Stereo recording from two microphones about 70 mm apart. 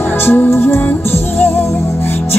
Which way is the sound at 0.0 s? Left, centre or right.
Left.